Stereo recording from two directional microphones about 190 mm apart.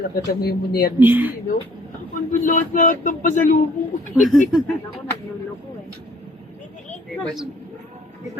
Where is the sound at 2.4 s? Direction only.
45° left (ahead or behind).